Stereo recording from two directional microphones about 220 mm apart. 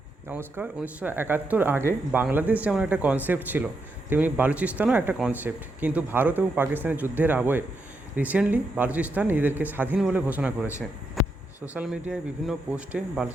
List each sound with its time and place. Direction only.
0.3 s speech: 10° right (ahead or behind)